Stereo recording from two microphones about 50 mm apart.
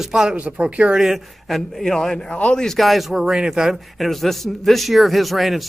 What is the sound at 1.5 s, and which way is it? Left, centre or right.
A man's voice, centre.